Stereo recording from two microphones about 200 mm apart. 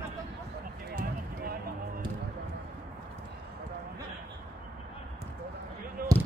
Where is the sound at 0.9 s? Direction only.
45° right (ahead or behind).